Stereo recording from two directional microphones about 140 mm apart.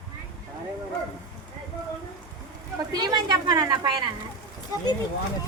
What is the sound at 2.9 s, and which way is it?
Speech, 30° right (ahead or behind).